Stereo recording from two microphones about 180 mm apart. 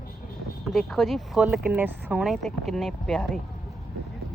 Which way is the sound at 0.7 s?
Centre (ahead or behind).